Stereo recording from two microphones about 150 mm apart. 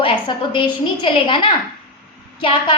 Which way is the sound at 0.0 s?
35° left (ahead or behind).